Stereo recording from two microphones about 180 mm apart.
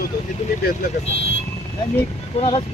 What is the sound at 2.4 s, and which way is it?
Speech, 35° left (ahead or behind).